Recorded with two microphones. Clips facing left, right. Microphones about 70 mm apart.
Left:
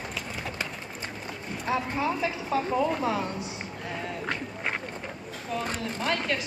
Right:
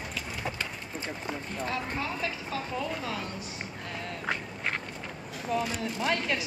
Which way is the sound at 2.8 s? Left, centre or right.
Left.